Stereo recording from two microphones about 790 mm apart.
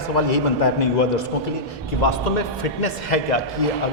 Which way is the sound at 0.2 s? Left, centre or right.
Left.